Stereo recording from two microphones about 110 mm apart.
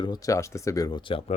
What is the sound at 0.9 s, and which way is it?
Speech, 50° left (ahead or behind).